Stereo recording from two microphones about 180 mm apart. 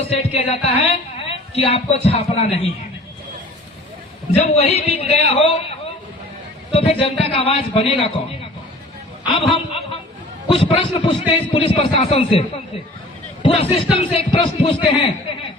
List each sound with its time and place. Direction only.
0.1 s a man's voice: 35° left (ahead or behind)
4.4 s a man's voice: 35° left (ahead or behind)
6.7 s a man's voice: 30° left (ahead or behind)
9.2 s a sound: 30° left (ahead or behind)
10.5 s a man's voice: 30° left (ahead or behind)